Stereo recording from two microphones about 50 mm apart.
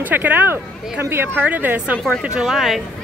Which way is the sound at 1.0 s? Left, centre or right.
Right.